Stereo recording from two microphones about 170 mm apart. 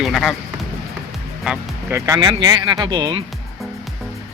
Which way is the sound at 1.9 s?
20° right (ahead or behind).